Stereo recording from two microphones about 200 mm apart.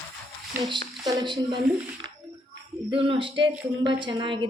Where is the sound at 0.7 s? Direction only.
25° right (ahead or behind).